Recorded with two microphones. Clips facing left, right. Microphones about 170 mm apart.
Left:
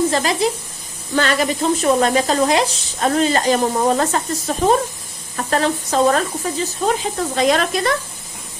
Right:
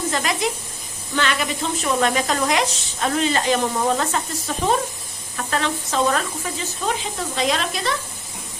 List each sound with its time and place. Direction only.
0.1 s speech: 35° left (ahead or behind); by 7.9 s 50° left (ahead or behind)